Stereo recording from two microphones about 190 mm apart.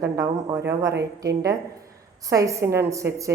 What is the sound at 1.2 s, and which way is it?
A woman's voice, 15° right (ahead or behind).